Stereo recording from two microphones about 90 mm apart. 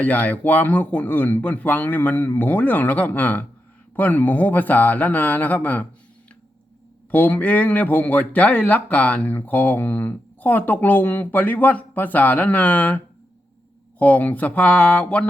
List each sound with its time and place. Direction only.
0.0 s speech: 15° left (ahead or behind)
7.1 s speech: 20° left (ahead or behind)
14.0 s speech: 20° left (ahead or behind)